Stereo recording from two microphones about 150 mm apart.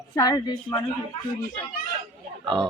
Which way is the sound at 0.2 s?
30° left (ahead or behind).